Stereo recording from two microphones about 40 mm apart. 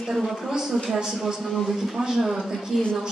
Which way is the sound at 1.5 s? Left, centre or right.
Centre.